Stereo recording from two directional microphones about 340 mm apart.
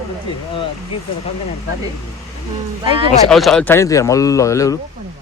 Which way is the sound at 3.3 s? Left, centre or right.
Centre.